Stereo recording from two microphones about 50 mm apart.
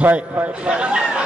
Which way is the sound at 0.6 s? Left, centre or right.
Centre.